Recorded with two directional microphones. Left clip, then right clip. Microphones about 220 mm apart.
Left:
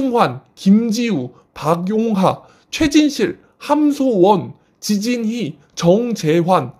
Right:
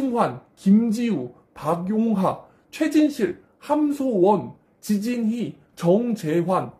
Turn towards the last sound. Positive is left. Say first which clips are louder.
# left 8 dB
turn(degrees=50)  # may be behind; listen again after turning